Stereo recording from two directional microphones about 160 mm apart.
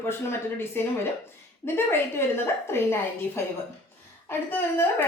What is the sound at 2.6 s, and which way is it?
A woman's voice, 15° left (ahead or behind).